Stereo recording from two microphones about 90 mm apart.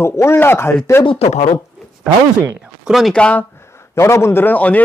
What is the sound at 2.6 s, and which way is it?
Speech, centre (ahead or behind).